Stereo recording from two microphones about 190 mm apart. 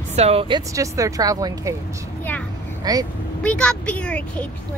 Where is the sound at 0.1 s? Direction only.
35° right (ahead or behind).